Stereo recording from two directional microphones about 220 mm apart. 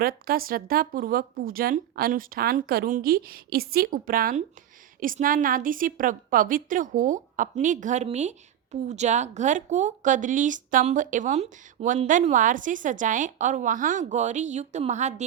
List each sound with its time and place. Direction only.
0.0 s a woman's voice: 40° right (ahead or behind)